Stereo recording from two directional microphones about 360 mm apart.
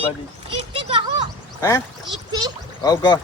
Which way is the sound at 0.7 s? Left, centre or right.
Centre.